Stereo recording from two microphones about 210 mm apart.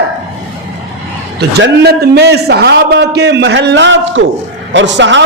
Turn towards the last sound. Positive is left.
turn(degrees=-60)  # may be behind; listen again after turning